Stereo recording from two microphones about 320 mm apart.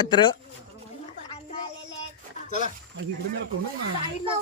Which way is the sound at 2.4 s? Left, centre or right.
Left.